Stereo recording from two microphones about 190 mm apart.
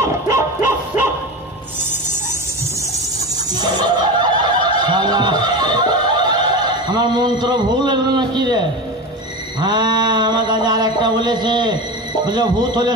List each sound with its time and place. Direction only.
0.0 s music: 10° right (ahead or behind)
3.5 s snicker: 20° right (ahead or behind)
9.6 s a sound: 25° right (ahead or behind)